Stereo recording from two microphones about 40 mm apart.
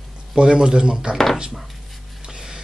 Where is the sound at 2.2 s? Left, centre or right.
Centre.